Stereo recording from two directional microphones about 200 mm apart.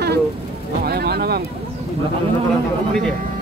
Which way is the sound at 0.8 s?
50° right (ahead or behind).